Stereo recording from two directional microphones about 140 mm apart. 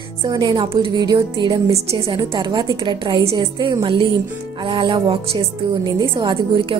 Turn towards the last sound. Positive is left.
turn(degrees=-35)  # may be behind; listen again after turning